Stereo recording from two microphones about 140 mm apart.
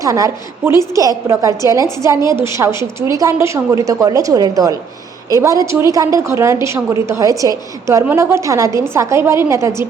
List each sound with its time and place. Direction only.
0.0 s a woman's voice: 25° right (ahead or behind)